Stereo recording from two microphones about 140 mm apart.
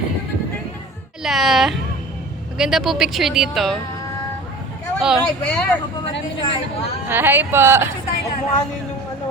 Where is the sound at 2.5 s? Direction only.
5° right (ahead or behind).